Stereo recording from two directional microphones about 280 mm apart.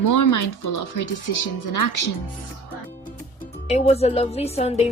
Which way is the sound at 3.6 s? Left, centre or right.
Left.